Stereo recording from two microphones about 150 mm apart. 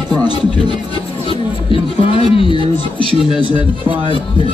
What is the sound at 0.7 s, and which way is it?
Speech, 35° left (ahead or behind).